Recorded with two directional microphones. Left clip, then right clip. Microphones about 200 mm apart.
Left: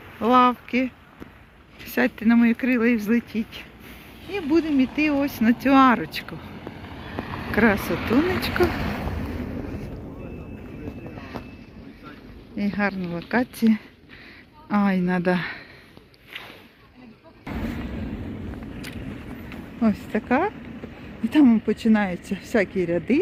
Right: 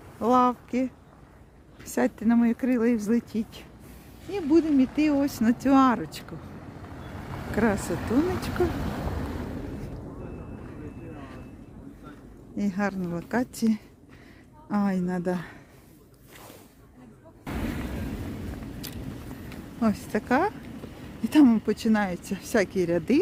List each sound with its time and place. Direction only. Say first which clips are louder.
0.2 s speech: left 4 dB; 10° right (ahead or behind)
6.7 s vehicle: left 8 dB; 25° right (ahead or behind)
7.5 s speech: left 6 dB; 5° right (ahead or behind)
7.9 s a sound: left 4 dB; 50° right (ahead or behind); by 9.6 s 35° right (ahead or behind)
12.5 s speech: left 4 dB; 25° right (ahead or behind)
14.7 s speech: left 5 dB; 15° right (ahead or behind)
15.0 s speech: left 7 dB; 5° left (ahead or behind)
17.4 s artillery fire: left 1 dB; 50° right (ahead or behind)
19.8 s speech: left 3 dB; 10° right (ahead or behind)